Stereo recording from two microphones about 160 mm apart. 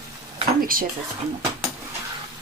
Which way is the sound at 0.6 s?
65° right (ahead or behind).